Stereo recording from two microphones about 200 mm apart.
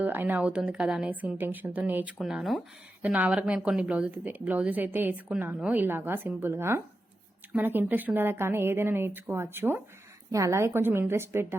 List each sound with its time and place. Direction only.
0.0 s a woman's voice: 10° right (ahead or behind)